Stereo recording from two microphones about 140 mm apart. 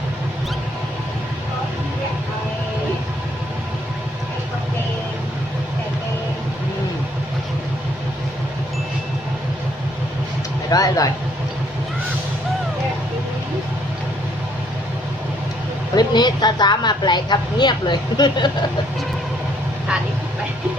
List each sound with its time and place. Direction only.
10.7 s speech: 25° left (ahead or behind)
16.0 s a woman's voice: 30° left (ahead or behind)